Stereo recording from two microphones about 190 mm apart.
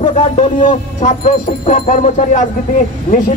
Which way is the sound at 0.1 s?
40° left (ahead or behind).